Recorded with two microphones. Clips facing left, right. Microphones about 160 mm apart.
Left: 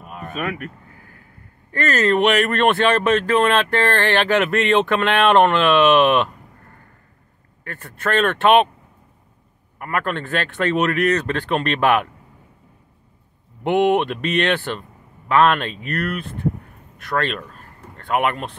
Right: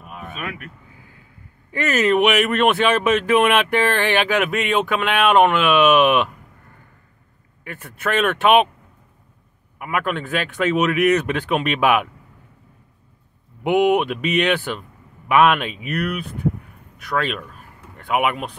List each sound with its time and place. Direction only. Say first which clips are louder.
0.0 s a sound: left 2 dB; centre (ahead or behind)
0.3 s speech: left 6 dB; 45° left (ahead or behind)
1.7 s speech: even; 10° right (ahead or behind)
7.6 s speech: even; 5° right (ahead or behind)
9.8 s speech: even; 5° right (ahead or behind)
13.7 s speech: even; 5° right (ahead or behind)